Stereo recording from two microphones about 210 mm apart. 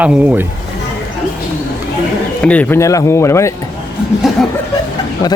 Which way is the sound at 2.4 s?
5° left (ahead or behind).